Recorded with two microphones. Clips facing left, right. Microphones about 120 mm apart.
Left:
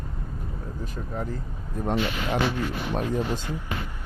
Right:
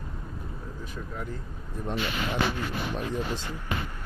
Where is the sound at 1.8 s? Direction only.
50° left (ahead or behind).